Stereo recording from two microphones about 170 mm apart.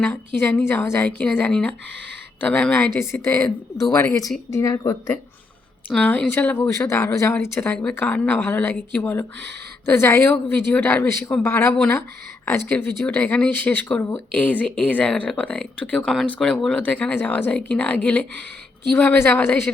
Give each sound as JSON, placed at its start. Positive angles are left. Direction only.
{"t": 0.0, "sound": "speech", "side_deg": 10}